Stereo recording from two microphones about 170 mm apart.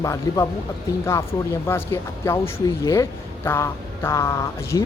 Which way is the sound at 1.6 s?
15° left (ahead or behind).